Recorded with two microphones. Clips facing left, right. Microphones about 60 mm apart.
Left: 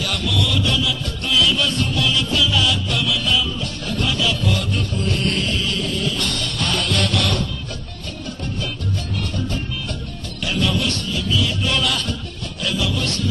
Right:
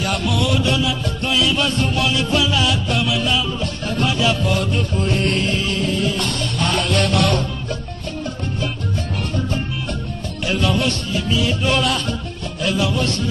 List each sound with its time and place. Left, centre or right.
0.4 s music: right
2.0 s music: right
4.2 s music: right
6.7 s music: right
7.2 s music: right
10.4 s music: right